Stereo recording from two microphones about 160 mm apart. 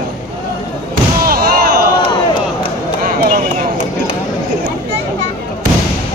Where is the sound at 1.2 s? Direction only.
70° right (ahead or behind).